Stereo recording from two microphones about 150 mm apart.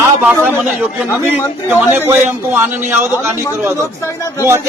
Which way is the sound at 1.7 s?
15° right (ahead or behind).